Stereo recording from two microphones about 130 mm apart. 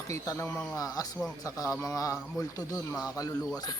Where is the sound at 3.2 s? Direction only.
30° left (ahead or behind).